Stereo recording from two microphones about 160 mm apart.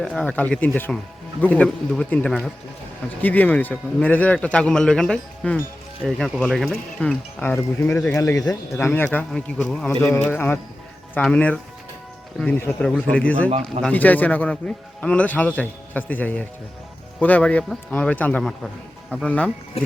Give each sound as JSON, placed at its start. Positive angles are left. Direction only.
{"t": 0.0, "sound": "speech", "side_deg": 5}